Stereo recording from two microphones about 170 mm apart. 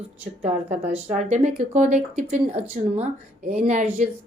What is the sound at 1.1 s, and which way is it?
A woman's voice, 45° right (ahead or behind).